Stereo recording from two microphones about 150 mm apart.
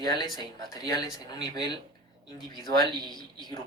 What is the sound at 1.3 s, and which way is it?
Speech, 30° left (ahead or behind).